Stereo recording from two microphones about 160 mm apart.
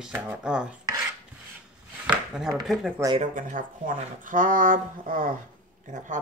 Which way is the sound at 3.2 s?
55° right (ahead or behind).